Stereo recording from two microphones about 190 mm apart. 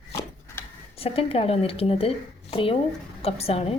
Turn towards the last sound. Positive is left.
turn(degrees=30)  # may be behind; listen again after turning